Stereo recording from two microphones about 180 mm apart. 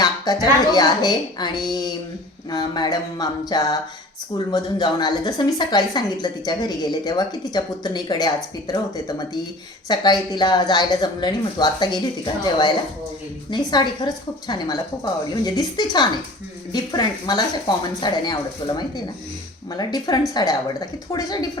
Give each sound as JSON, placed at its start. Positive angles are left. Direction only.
{"t": 0.3, "sound": "a woman's voice", "side_deg": 20}